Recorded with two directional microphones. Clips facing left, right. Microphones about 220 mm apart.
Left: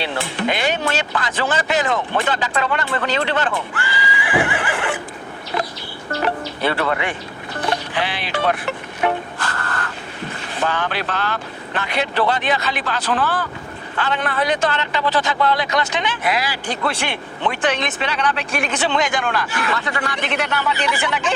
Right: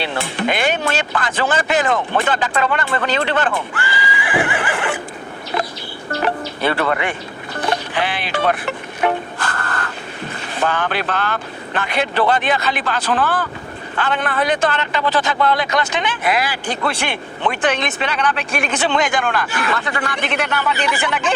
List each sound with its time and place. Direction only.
0.0 s speech: 50° right (ahead or behind)
7.7 s speech: 55° right (ahead or behind)
9.4 s a sound: 50° right (ahead or behind)
10.7 s speech: 55° right (ahead or behind)